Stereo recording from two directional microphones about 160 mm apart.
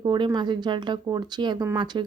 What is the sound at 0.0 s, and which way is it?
Speech, 25° right (ahead or behind).